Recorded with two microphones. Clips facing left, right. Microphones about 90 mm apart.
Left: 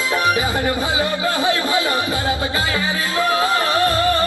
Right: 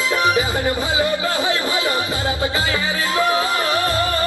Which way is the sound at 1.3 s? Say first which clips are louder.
Left 2 dB; 20° right (ahead or behind).